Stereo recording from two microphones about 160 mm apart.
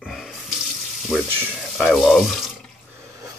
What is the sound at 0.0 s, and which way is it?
Water tap, centre (ahead or behind).